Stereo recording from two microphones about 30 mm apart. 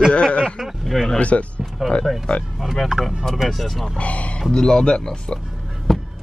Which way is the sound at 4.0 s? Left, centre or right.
Left.